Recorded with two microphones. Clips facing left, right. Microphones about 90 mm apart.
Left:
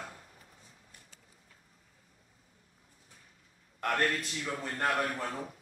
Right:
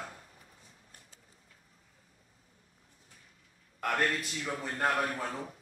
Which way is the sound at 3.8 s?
Centre (ahead or behind).